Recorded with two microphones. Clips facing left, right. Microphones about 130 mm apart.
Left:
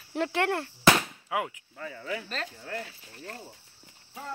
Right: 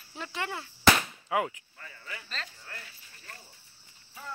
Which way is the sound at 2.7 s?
80° left.